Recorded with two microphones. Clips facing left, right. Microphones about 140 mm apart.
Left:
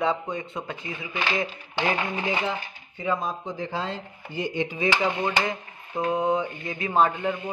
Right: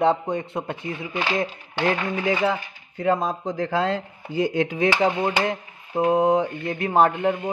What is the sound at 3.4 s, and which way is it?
A man's voice, 90° right.